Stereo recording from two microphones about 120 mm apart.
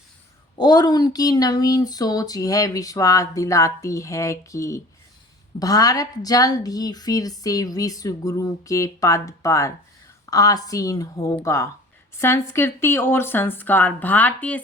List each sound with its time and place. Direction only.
0.6 s speech: 35° left (ahead or behind); by 14.6 s 10° left (ahead or behind)